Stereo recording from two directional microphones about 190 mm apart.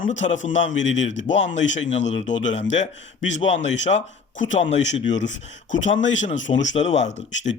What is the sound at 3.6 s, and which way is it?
Speech, 70° left (ahead or behind).